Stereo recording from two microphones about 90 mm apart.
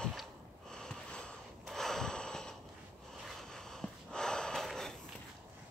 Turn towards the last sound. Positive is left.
turn(degrees=5)  # may be behind; listen again after turning